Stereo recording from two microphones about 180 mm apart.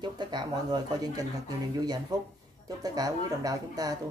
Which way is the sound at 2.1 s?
20° right (ahead or behind).